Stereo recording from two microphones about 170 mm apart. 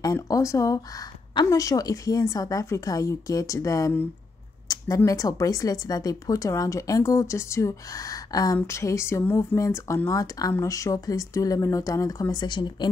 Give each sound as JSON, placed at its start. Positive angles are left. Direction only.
{"t": 0.0, "sound": "speech", "side_deg": 20}